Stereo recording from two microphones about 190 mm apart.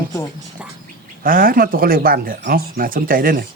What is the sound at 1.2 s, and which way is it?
Speech, 50° right (ahead or behind).